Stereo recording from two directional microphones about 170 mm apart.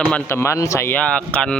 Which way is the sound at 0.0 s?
10° left (ahead or behind).